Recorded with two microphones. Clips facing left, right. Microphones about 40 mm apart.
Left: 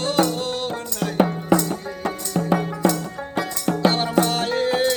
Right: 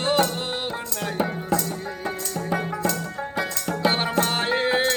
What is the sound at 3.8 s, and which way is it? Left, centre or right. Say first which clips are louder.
Music: left 3 dB; right.